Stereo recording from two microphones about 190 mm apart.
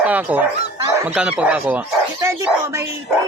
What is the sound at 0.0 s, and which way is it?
Speech, 10° right (ahead or behind).